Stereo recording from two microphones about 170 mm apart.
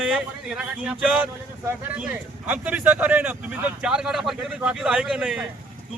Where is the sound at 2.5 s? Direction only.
10° right (ahead or behind).